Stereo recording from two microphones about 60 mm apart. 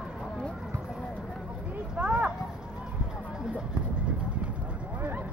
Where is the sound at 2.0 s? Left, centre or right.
Centre.